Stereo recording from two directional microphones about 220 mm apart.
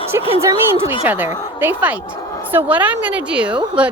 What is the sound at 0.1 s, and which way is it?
A woman's voice, 10° right (ahead or behind).